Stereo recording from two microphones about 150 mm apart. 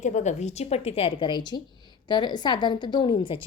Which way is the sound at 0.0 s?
55° left (ahead or behind).